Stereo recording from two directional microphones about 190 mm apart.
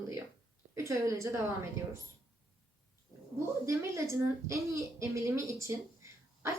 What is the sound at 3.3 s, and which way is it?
A woman's voice, 15° right (ahead or behind).